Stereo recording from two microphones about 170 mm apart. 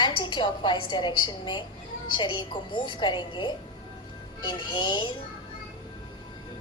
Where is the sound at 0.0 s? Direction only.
25° left (ahead or behind).